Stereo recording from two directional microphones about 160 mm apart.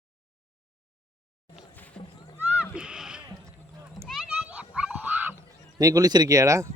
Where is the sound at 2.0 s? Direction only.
5° left (ahead or behind).